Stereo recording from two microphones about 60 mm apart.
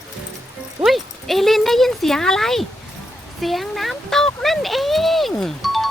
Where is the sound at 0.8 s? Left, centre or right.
Centre.